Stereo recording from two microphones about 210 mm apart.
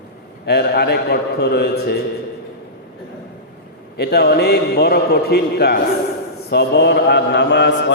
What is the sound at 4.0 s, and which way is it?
A man's voice, 50° left (ahead or behind).